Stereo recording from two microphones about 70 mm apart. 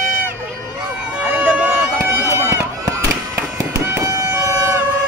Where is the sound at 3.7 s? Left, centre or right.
Right.